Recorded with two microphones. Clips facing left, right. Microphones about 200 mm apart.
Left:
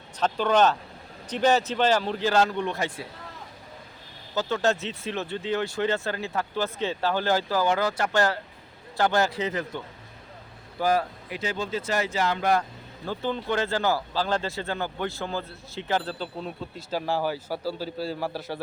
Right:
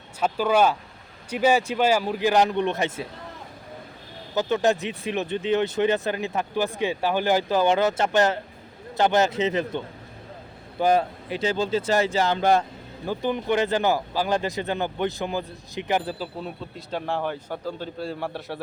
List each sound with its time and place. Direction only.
0.2 s speech: 10° right (ahead or behind)
4.4 s speech: 15° right (ahead or behind)
13.1 s speech: 15° right (ahead or behind); by 18.6 s centre (ahead or behind)